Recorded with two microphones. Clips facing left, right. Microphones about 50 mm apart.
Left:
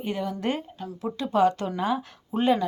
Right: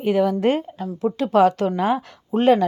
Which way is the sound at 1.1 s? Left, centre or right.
Right.